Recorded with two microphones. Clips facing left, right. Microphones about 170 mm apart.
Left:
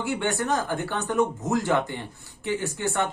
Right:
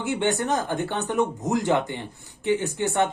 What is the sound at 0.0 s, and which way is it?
Speech, 20° right (ahead or behind).